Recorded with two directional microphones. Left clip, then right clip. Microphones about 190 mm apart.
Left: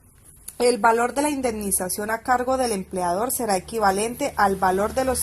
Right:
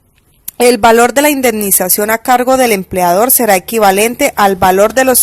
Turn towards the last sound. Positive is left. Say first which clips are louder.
# right 13 dB
turn(degrees=-40)  # may be behind; listen again after turning